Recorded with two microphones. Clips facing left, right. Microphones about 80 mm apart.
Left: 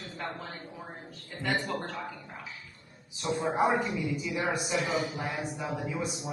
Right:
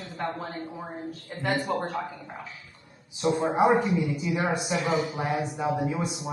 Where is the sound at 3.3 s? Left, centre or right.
Right.